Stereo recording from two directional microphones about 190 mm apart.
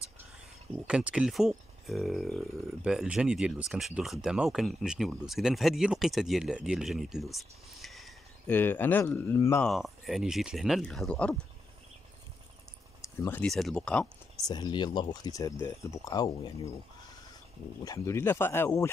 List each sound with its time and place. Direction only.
0.8 s speech: 5° right (ahead or behind); by 9.7 s 10° left (ahead or behind)
9.7 s speech: centre (ahead or behind)
13.2 s speech: 10° left (ahead or behind)
14.5 s speech: 20° left (ahead or behind)
17.8 s speech: 15° left (ahead or behind)